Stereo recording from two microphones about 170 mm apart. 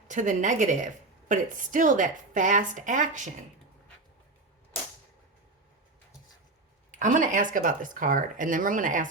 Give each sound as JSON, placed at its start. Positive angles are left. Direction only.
{"t": 0.1, "sound": "speech", "side_deg": -45}
{"t": 7.0, "sound": "speech", "side_deg": -50}